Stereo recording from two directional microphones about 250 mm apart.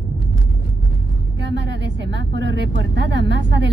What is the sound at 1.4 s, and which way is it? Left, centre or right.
Vehicle, right.